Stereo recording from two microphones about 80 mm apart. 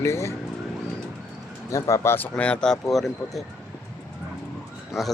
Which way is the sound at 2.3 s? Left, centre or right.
Centre.